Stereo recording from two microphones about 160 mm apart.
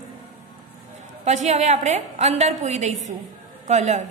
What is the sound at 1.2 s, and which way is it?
A woman's voice, 45° right (ahead or behind).